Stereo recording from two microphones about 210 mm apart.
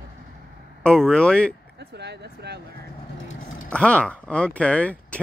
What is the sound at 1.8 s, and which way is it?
Speech, 50° right (ahead or behind).